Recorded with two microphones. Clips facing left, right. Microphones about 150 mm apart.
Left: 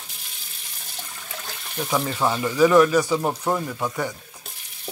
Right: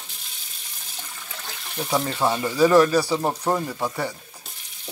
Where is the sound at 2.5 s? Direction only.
35° right (ahead or behind).